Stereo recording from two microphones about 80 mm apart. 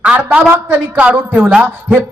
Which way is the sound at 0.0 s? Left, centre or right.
Centre.